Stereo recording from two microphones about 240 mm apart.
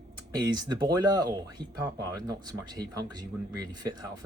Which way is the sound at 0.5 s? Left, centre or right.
Centre.